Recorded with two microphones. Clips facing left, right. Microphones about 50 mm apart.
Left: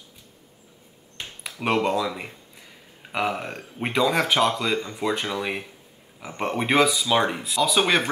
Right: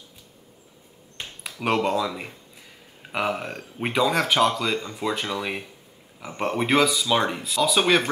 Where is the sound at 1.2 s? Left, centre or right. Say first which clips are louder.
Even; centre.